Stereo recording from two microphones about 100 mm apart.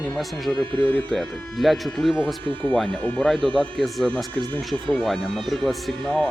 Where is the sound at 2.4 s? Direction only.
15° left (ahead or behind).